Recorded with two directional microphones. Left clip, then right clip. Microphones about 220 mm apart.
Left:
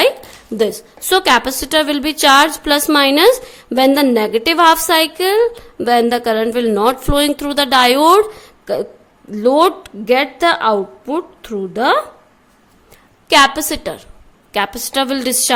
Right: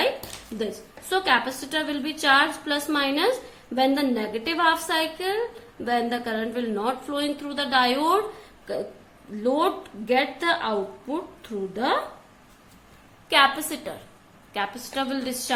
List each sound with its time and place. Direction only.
1.1 s a woman's voice: 50° left (ahead or behind)
9.4 s a woman's voice: 50° left (ahead or behind)
13.2 s a woman's voice: 45° left (ahead or behind)